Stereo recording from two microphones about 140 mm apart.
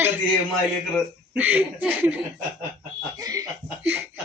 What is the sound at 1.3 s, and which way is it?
Speech, 15° right (ahead or behind).